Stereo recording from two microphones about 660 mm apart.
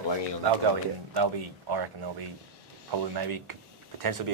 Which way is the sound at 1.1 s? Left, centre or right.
Right.